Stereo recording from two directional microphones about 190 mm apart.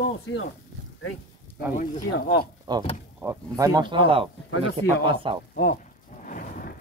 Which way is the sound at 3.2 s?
15° right (ahead or behind).